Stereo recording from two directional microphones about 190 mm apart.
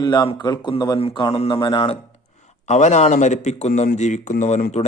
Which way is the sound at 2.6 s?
40° left (ahead or behind).